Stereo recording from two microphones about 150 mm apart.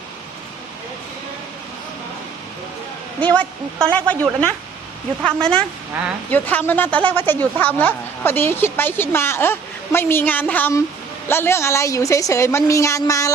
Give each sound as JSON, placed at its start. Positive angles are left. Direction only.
{"t": 3.2, "sound": "a woman's voice", "side_deg": 10}